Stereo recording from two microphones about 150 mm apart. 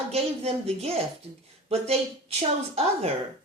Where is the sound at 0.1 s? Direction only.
45° right (ahead or behind).